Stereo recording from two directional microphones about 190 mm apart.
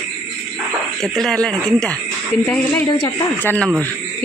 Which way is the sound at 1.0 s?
Centre (ahead or behind).